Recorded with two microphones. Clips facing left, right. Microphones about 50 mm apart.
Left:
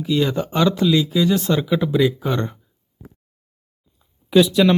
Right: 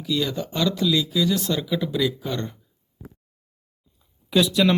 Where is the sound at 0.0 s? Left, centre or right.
Left.